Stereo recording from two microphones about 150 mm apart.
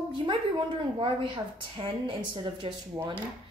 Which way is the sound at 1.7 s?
35° right (ahead or behind).